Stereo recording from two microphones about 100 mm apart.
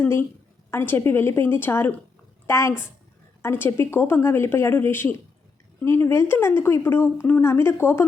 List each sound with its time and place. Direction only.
0.0 s speech: 20° left (ahead or behind)